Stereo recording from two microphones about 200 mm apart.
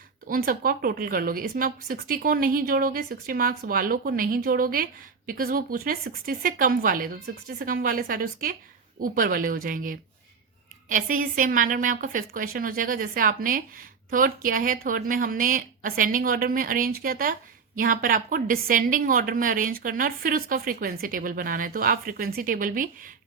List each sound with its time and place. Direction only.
0.3 s speech: 45° right (ahead or behind)